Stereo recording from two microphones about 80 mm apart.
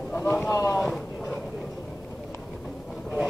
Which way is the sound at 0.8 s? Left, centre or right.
Centre.